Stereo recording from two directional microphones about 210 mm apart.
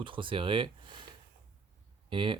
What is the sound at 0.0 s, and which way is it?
Speech, 25° right (ahead or behind).